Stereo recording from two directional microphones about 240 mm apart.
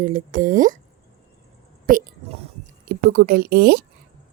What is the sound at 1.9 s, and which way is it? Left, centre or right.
A woman's voice, right.